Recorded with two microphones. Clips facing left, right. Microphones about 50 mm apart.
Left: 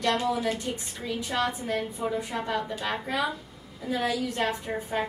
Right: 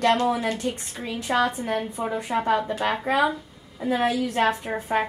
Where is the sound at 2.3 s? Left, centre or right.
Right.